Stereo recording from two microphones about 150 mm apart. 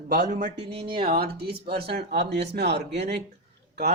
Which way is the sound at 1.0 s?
90° right.